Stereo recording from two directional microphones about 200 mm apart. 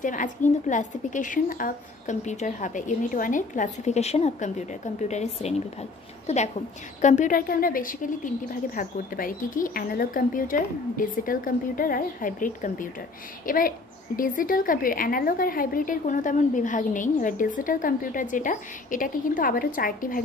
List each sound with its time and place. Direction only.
0.0 s a woman's voice: 40° left (ahead or behind)